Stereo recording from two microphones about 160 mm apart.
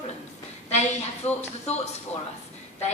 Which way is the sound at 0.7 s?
45° left (ahead or behind).